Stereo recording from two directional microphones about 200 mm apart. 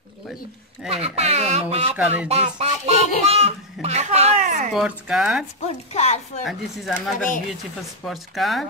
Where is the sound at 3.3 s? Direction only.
30° right (ahead or behind).